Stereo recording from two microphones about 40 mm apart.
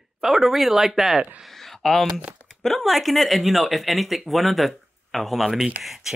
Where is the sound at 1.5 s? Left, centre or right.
Centre.